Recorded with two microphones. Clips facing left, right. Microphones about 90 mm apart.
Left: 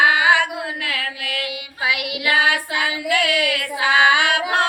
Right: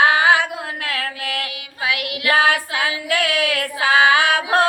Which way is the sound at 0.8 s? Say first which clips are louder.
Right 1 dB; 45° right (ahead or behind).